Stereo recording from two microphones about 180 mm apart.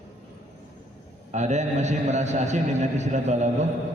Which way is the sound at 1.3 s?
40° right (ahead or behind).